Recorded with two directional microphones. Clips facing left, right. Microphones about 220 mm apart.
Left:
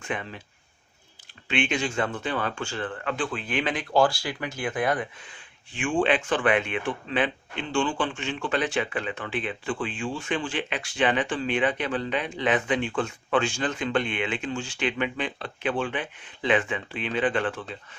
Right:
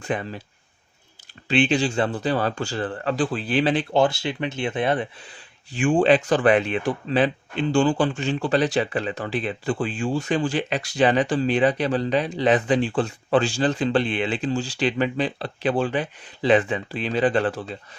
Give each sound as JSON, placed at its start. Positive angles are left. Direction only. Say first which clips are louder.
{"t": 0.0, "sound": "speech", "louder": "right 5 dB", "side_deg": -35}
{"t": 1.5, "sound": "speech", "louder": "right 6 dB", "side_deg": -35}